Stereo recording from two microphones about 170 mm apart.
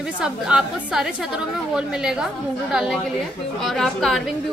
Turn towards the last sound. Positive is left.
turn(degrees=0)  # may be behind; listen again after turning